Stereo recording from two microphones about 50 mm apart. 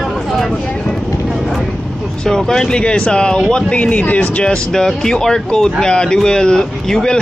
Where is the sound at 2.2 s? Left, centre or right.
Centre.